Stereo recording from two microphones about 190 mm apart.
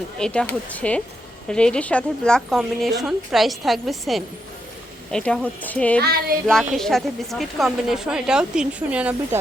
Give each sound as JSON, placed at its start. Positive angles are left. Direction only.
{"t": 0.2, "sound": "speech", "side_deg": 5}
{"t": 6.0, "sound": "child singing", "side_deg": -55}
{"t": 6.5, "sound": "speech", "side_deg": 0}